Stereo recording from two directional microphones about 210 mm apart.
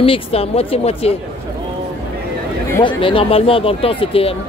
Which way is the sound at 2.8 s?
25° left (ahead or behind).